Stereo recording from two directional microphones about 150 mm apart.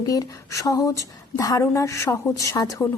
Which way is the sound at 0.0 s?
25° left (ahead or behind).